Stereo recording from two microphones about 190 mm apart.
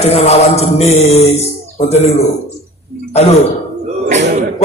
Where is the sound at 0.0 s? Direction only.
35° left (ahead or behind).